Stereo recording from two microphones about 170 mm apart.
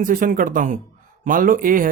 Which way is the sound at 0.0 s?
55° right (ahead or behind).